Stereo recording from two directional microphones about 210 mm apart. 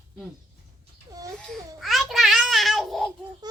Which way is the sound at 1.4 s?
Centre (ahead or behind).